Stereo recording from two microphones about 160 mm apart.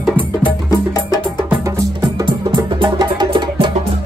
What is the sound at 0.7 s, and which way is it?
Music, 20° left (ahead or behind).